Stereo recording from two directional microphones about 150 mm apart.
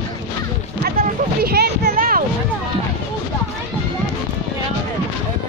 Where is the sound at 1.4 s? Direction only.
90° right; by 2.2 s 70° right (ahead or behind).